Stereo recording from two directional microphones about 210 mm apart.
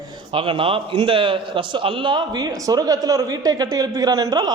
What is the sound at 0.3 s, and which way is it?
A man's voice, 25° right (ahead or behind).